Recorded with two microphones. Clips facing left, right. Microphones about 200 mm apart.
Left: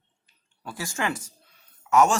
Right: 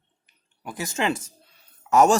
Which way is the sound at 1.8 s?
35° right (ahead or behind).